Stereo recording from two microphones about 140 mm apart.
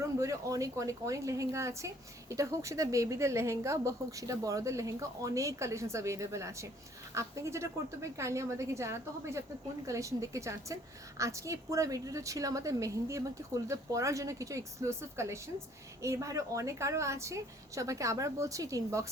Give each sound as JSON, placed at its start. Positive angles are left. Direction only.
{"t": 0.2, "sound": "a woman's voice", "side_deg": -25}